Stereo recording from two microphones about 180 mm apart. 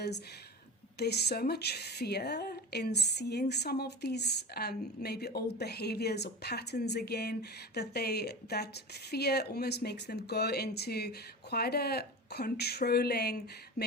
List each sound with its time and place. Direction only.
0.9 s speech: 65° left (ahead or behind)